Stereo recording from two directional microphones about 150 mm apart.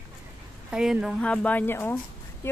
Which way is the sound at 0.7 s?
5° right (ahead or behind).